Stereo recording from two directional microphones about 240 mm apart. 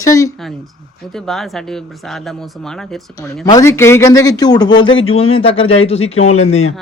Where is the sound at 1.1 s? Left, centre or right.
Centre; by 6.4 s left.